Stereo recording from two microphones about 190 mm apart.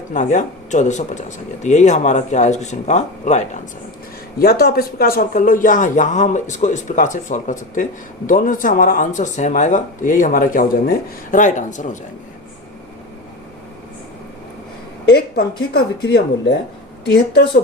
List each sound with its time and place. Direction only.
0.1 s speech: 40° left (ahead or behind)
4.4 s speech: 55° left (ahead or behind); by 11.9 s 40° left (ahead or behind)
15.7 s speech: 60° left (ahead or behind)